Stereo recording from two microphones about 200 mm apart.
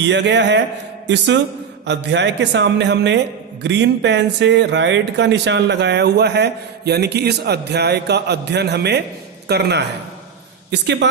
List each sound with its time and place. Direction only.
0.0 s speech: 60° right (ahead or behind)